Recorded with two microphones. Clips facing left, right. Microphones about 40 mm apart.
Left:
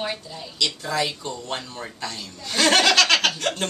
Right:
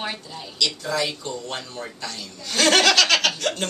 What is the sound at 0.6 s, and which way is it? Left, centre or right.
Speech, centre.